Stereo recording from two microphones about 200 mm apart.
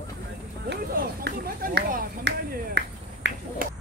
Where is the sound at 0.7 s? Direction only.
45° right (ahead or behind).